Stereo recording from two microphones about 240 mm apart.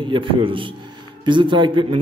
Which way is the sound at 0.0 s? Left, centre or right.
Right.